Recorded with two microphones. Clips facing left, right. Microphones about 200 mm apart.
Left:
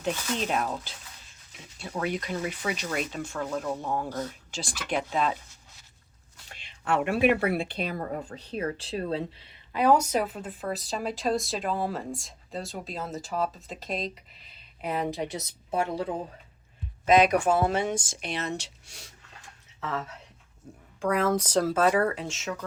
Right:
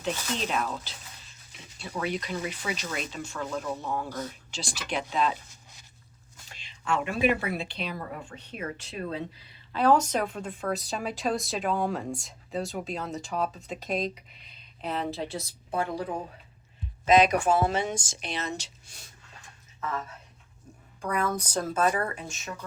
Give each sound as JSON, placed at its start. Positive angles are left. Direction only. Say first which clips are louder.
{"t": 0.0, "sound": "speech", "louder": "left 2 dB", "side_deg": 50}
{"t": 2.0, "sound": "speech", "louder": "left 1 dB", "side_deg": 50}
{"t": 4.5, "sound": "speech", "louder": "left 3 dB", "side_deg": 50}
{"t": 6.5, "sound": "speech", "louder": "left 2 dB", "side_deg": 60}
{"t": 9.7, "sound": "a woman's voice", "louder": "left 1 dB", "side_deg": 10}
{"t": 17.1, "sound": "a woman's voice", "louder": "even", "side_deg": 55}
{"t": 21.0, "sound": "speech", "louder": "left 4 dB", "side_deg": 90}